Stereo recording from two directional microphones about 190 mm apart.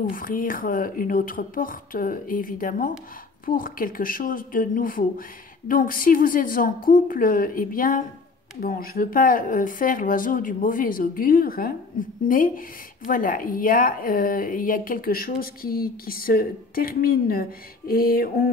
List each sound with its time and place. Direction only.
0.0 s a woman's voice: 50° left (ahead or behind)